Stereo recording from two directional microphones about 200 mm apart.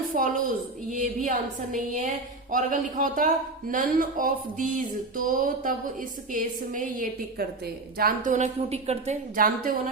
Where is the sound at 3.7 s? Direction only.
40° right (ahead or behind).